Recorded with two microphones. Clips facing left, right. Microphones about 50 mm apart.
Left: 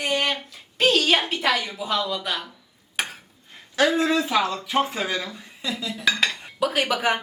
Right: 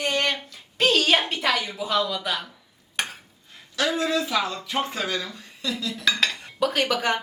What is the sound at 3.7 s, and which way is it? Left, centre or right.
Speech, left.